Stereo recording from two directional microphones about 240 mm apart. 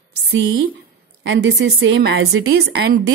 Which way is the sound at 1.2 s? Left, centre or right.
Right.